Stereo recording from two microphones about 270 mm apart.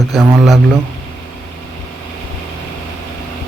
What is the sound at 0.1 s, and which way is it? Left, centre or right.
Speech, centre.